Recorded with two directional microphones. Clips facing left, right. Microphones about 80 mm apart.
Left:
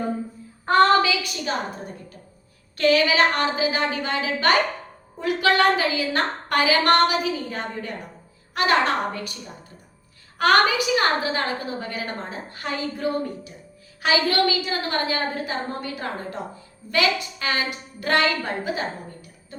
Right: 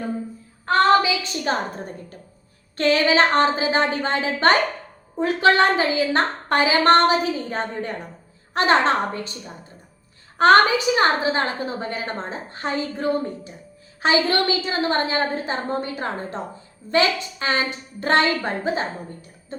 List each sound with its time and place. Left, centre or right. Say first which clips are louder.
1.0 s a woman's voice: even; right
1.5 s a woman's voice: right 5 dB; right